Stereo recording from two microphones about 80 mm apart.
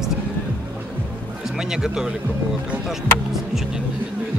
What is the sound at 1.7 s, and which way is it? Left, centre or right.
Speech, centre.